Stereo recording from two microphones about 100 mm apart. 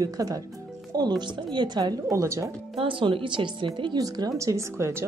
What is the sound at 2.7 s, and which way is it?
Speech, 60° right (ahead or behind).